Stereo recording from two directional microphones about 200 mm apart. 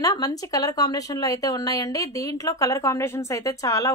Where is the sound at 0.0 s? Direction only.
15° left (ahead or behind).